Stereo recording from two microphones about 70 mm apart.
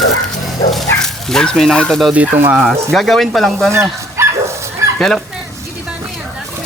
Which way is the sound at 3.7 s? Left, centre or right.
Right.